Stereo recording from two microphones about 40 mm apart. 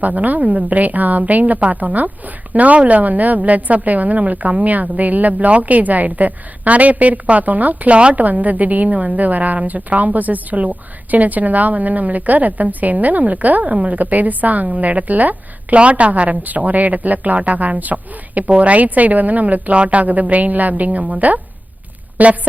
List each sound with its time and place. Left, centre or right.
0.0 s a woman's voice: right
7.9 s a woman's voice: right
8.2 s a woman's voice: right
15.8 s a woman's voice: right
19.7 s a woman's voice: right